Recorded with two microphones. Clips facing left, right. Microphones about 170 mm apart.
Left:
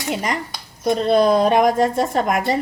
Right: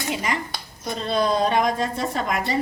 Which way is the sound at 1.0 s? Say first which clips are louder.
Left 6 dB; 55° left (ahead or behind).